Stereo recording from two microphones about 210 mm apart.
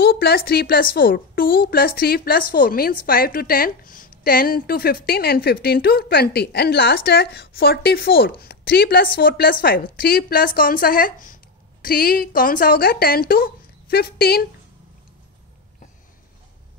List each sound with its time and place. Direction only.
0.0 s a woman's voice: 50° left (ahead or behind)